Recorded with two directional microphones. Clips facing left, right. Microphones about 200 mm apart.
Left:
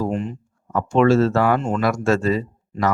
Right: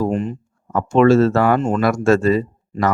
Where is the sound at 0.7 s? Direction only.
50° right (ahead or behind).